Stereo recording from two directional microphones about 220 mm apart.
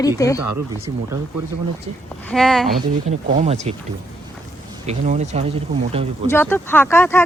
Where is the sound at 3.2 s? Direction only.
35° right (ahead or behind).